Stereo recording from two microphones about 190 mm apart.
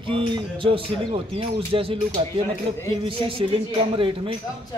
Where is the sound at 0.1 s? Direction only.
25° right (ahead or behind).